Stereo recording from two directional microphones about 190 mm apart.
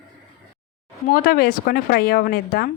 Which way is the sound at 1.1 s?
50° left (ahead or behind).